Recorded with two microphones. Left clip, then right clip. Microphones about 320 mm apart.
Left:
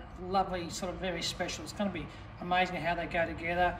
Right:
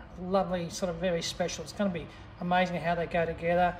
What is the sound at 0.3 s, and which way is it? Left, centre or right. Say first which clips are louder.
Speech: right 2 dB; right.